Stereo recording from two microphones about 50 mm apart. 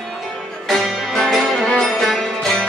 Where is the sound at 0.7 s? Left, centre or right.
Centre.